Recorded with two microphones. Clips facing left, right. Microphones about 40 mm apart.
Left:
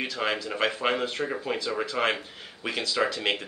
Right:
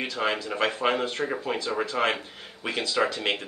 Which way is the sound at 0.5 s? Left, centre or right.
Centre.